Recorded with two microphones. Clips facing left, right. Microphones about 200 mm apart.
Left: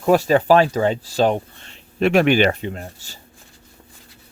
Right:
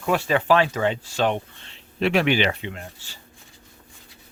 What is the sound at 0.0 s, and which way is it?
Speech, 40° left (ahead or behind).